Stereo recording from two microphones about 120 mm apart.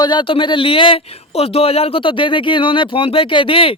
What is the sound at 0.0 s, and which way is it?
Speech, 40° left (ahead or behind).